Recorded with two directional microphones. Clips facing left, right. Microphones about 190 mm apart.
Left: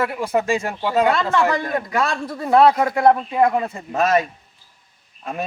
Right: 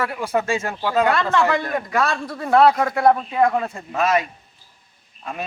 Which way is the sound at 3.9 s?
40° left (ahead or behind).